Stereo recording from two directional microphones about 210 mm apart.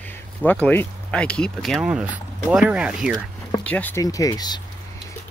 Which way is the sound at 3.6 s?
5° left (ahead or behind).